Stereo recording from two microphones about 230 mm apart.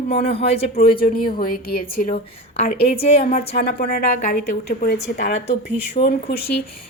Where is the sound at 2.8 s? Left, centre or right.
Left.